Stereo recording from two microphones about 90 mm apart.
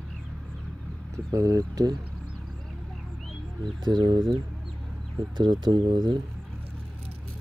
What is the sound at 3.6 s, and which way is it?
Speech, 60° right (ahead or behind).